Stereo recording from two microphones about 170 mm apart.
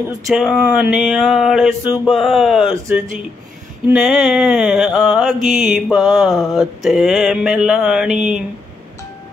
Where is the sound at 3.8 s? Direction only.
Centre (ahead or behind).